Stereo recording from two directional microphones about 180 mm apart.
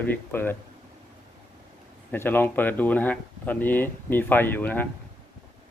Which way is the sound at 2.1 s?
10° left (ahead or behind).